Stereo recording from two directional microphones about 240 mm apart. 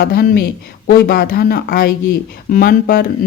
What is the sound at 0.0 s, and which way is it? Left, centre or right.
A woman's voice, left.